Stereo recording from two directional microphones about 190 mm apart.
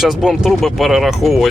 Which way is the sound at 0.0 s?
Centre (ahead or behind).